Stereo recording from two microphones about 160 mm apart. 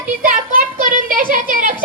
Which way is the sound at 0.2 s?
60° right (ahead or behind).